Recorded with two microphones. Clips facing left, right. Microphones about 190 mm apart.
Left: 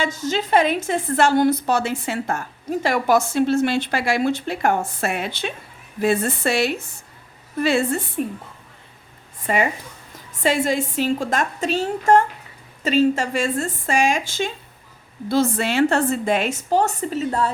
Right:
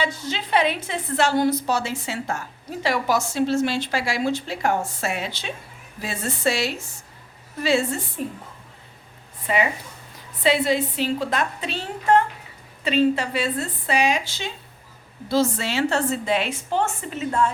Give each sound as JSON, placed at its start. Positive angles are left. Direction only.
{"t": 0.0, "sound": "a woman's voice", "side_deg": 45}
{"t": 9.5, "sound": "a woman's voice", "side_deg": 45}